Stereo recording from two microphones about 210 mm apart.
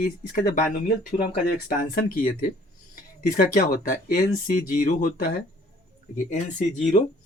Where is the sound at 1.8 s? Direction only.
45° left (ahead or behind).